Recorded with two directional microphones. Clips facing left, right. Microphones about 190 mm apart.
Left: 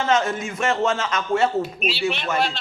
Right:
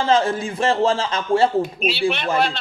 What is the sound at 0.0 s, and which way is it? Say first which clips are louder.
A man's voice: right 3 dB; 30° right (ahead or behind).